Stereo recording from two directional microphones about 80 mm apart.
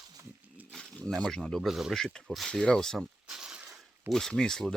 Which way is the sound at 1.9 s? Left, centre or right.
Centre.